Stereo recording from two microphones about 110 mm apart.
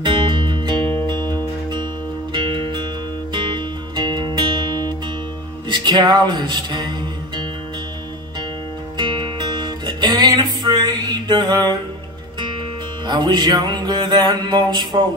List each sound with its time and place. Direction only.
0.0 s music: 45° right (ahead or behind)
8.9 s music: 45° right (ahead or behind)
13.0 s music: 45° right (ahead or behind)